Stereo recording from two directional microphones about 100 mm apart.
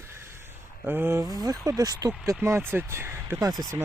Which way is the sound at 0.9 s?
20° right (ahead or behind).